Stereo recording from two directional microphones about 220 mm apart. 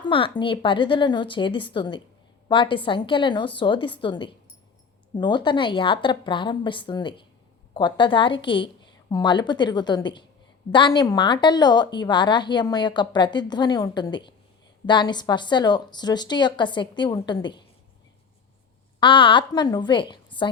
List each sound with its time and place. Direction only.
0.0 s a woman's voice: 20° left (ahead or behind)
18.9 s a woman's voice: 20° left (ahead or behind)